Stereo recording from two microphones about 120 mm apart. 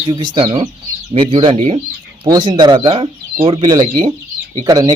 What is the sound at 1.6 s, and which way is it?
Speech, 65° right (ahead or behind).